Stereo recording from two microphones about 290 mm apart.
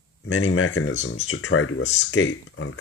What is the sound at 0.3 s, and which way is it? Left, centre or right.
Speech, left.